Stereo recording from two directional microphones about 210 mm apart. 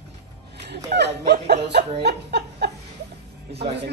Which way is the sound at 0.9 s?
50° right (ahead or behind).